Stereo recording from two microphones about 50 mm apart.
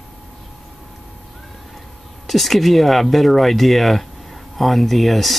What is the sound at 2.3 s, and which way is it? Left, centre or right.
Speech, centre.